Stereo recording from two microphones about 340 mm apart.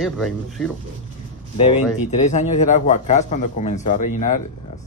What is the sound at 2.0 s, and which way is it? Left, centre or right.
A man's voice, left.